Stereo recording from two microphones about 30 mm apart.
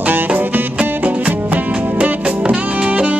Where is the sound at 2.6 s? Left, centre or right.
Right.